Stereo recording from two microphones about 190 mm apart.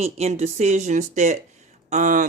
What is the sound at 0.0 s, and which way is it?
Speech, 35° right (ahead or behind).